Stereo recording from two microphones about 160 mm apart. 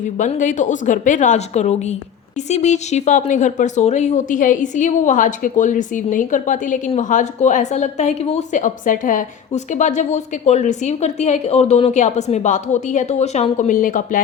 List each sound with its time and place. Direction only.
0.2 s a woman's voice: 50° left (ahead or behind)